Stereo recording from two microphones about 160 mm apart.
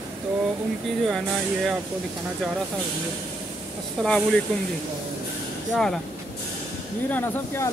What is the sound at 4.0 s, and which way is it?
Speech, 5° left (ahead or behind).